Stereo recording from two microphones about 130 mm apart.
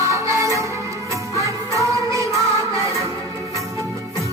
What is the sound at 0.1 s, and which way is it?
Music, 25° right (ahead or behind).